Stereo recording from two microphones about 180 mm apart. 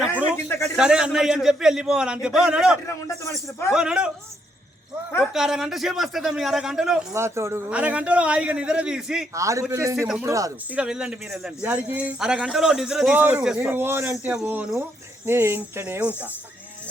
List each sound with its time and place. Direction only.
0.4 s a man's voice: 15° left (ahead or behind)
0.8 s speech: 5° right (ahead or behind)
5.3 s speech: 5° right (ahead or behind)
7.1 s a man's voice: 15° right (ahead or behind)
9.3 s a man's voice: 15° right (ahead or behind)
10.8 s a man's voice: 5° right (ahead or behind)